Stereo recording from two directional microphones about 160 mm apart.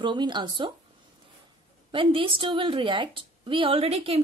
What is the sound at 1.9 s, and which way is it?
Speech, 35° right (ahead or behind).